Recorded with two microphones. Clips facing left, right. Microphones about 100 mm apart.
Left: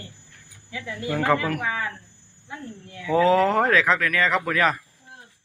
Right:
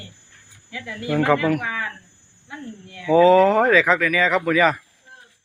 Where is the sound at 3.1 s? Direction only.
Centre (ahead or behind).